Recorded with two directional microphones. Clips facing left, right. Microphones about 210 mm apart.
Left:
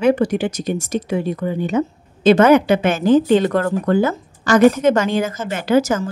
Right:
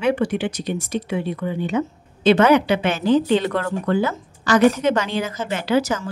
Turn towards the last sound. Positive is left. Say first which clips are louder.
# left 4 dB
turn(degrees=45)  # may be behind; listen again after turning